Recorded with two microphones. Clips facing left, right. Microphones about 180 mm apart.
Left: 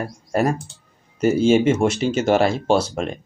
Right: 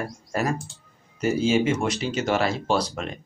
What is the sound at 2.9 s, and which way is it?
Speech, 45° left (ahead or behind).